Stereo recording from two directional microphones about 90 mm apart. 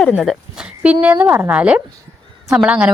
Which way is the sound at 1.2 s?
25° right (ahead or behind).